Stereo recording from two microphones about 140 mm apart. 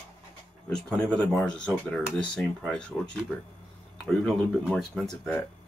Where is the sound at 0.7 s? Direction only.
5° left (ahead or behind).